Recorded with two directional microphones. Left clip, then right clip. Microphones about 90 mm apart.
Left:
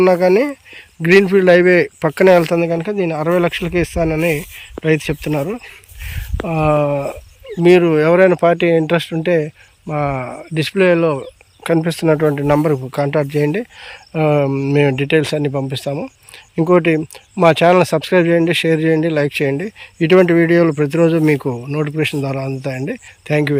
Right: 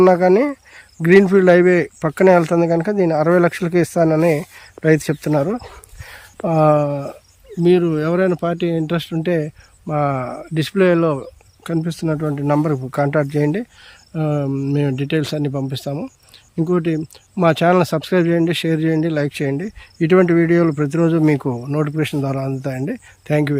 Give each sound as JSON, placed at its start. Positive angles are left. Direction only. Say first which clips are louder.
{"t": 0.0, "sound": "speech", "louder": "even", "side_deg": -40}
{"t": 2.6, "sound": "speech", "louder": "right 1 dB", "side_deg": -60}
{"t": 6.1, "sound": "a sound", "louder": "right 2 dB", "side_deg": -55}
{"t": 6.7, "sound": "speech", "louder": "left 3 dB", "side_deg": -20}
{"t": 9.0, "sound": "speech", "louder": "left 4 dB", "side_deg": -20}
{"t": 11.6, "sound": "speech", "louder": "left 7 dB", "side_deg": -5}
{"t": 12.8, "sound": "speech", "louder": "left 1 dB", "side_deg": -40}
{"t": 13.8, "sound": "speech", "louder": "left 7 dB", "side_deg": -10}
{"t": 15.0, "sound": "speech", "louder": "left 5 dB", "side_deg": -15}
{"t": 16.6, "sound": "speech", "louder": "left 7 dB", "side_deg": -5}
{"t": 17.3, "sound": "speech", "louder": "left 4 dB", "side_deg": -20}